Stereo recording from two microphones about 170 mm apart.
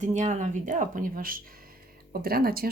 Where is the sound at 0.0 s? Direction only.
45° right (ahead or behind).